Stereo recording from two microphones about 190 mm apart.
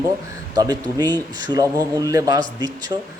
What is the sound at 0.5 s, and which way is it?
Speech, 20° right (ahead or behind).